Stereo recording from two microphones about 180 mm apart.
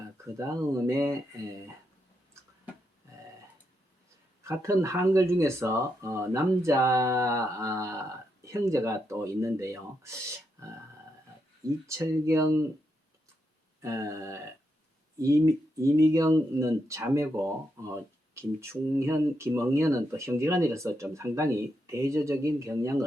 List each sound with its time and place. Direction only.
0.3 s speech: 15° right (ahead or behind)
4.4 s speech: 15° right (ahead or behind)
11.6 s speech: 15° right (ahead or behind)
13.8 s speech: 15° right (ahead or behind)